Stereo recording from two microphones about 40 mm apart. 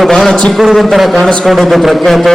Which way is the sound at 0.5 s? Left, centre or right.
Centre.